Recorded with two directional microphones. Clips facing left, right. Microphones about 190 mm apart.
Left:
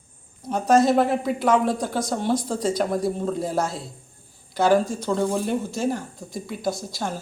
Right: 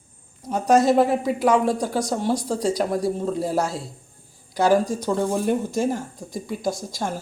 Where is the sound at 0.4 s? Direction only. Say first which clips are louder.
Right 1 dB; 10° right (ahead or behind).